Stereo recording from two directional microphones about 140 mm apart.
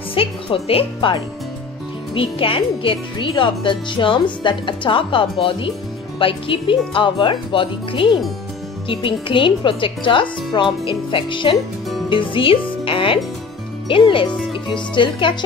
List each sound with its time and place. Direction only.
0.1 s a woman's voice: 40° left (ahead or behind)